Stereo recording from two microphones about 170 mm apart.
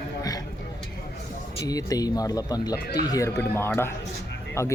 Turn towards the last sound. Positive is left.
turn(degrees=15)  # may be behind; listen again after turning